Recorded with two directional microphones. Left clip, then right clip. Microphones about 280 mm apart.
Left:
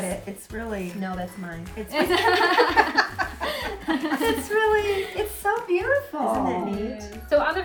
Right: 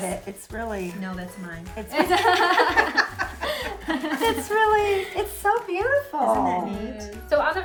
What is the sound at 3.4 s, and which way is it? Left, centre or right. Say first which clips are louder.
Chuckle: even; centre.